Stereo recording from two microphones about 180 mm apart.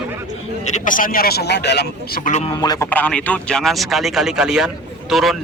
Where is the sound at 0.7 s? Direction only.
45° left (ahead or behind); by 2.2 s 70° left (ahead or behind).